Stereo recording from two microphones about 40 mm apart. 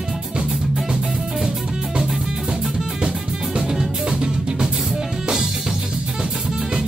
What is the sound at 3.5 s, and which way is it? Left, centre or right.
Music, centre.